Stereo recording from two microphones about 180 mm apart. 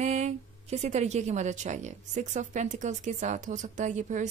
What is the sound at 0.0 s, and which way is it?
A woman's voice, 40° right (ahead or behind).